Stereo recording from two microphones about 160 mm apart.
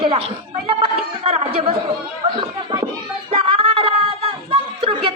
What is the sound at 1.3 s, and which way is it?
Chatter, 40° right (ahead or behind).